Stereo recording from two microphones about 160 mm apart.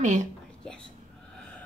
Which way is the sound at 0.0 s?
50° right (ahead or behind).